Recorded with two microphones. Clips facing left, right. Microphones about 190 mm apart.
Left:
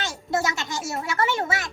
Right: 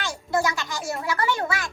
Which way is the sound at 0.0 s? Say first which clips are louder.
Right 1 dB; 25° left (ahead or behind).